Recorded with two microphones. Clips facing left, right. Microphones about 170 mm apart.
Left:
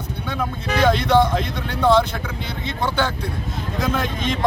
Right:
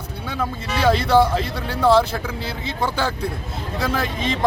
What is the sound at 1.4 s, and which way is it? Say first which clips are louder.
Speech: even; 35° right (ahead or behind).